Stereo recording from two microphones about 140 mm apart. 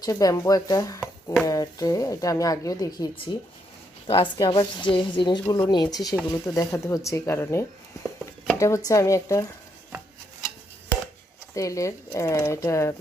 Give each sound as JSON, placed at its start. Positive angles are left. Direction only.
{"t": 0.0, "sound": "a woman's voice", "side_deg": 25}
{"t": 11.5, "sound": "speech", "side_deg": 25}